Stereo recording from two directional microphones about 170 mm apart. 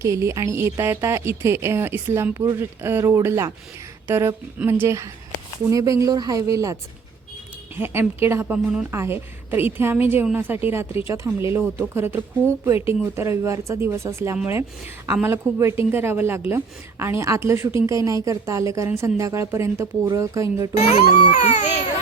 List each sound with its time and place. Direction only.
0.0 s a woman's voice: 15° right (ahead or behind)
7.8 s a woman's voice: 15° right (ahead or behind)
8.5 s a woman's voice: 5° right (ahead or behind)
21.2 s speech: 40° left (ahead or behind)